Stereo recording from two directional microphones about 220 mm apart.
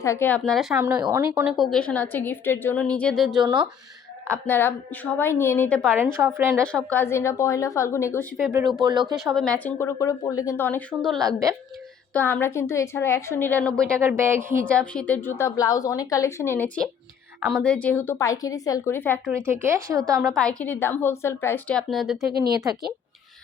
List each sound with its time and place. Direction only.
0.0 s a woman's voice: 10° left (ahead or behind); by 1.5 s 15° right (ahead or behind)
1.5 s a woman's voice: centre (ahead or behind)
3.4 s speech: 20° right (ahead or behind)
4.3 s a woman's voice: 10° left (ahead or behind)
6.0 s speech: 10° right (ahead or behind)
6.7 s a woman's voice: 5° left (ahead or behind)
8.8 s speech: 20° right (ahead or behind)
9.2 s a woman's voice: centre (ahead or behind)
14.0 s speech: 10° right (ahead or behind)
14.7 s a woman's voice: 5° left (ahead or behind)
19.5 s speech: 10° right (ahead or behind)
20.2 s a woman's voice: 5° left (ahead or behind)
22.3 s speech: 45° right (ahead or behind)